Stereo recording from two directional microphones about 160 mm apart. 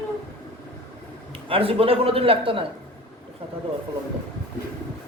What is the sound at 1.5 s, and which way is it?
A man's voice, 35° right (ahead or behind).